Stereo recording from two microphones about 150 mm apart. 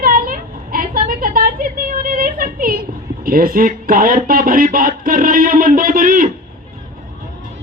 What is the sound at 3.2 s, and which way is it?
Speech, 70° right (ahead or behind).